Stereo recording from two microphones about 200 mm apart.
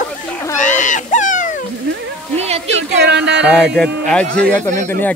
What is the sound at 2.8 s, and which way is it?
Speech, 55° right (ahead or behind).